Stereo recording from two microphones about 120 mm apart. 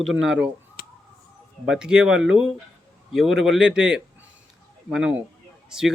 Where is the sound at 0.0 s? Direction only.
Centre (ahead or behind).